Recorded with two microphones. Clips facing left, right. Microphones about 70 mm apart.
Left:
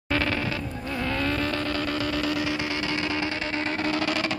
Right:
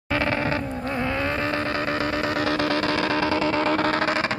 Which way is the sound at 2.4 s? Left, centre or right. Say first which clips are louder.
Right 6 dB; right.